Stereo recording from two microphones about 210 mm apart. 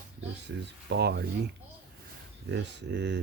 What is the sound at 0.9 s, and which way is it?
Speech, 50° right (ahead or behind).